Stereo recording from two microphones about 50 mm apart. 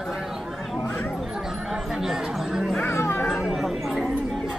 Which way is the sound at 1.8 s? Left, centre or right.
Centre.